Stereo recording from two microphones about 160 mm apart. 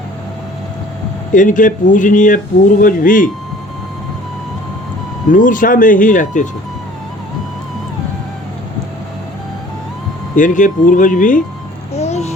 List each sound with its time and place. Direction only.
1.3 s speech: 55° left (ahead or behind)
5.3 s speech: 55° left (ahead or behind)
10.3 s speech: 55° left (ahead or behind)
11.9 s music: 45° left (ahead or behind)